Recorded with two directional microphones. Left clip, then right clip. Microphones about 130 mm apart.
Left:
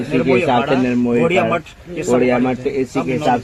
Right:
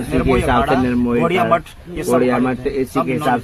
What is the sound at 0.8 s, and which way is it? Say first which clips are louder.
Speech: left 1 dB; 25° left (ahead or behind).